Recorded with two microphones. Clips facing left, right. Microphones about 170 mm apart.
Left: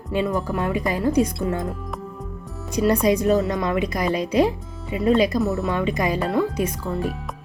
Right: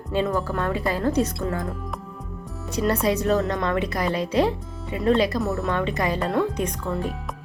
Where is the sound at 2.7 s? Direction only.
15° left (ahead or behind).